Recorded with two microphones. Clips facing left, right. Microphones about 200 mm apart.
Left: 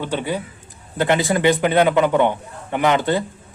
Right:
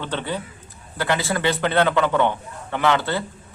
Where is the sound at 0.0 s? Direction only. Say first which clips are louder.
Left 4 dB; 10° left (ahead or behind).